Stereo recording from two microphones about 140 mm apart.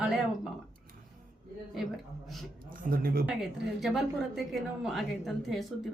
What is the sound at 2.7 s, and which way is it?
Speech, 80° right.